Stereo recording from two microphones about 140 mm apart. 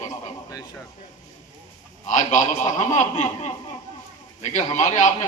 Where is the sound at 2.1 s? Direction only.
60° left (ahead or behind).